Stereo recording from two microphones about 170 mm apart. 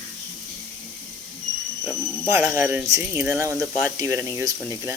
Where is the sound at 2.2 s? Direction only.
15° right (ahead or behind).